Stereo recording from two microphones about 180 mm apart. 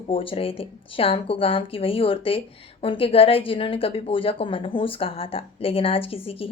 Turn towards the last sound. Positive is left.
turn(degrees=30)  # may be behind; listen again after turning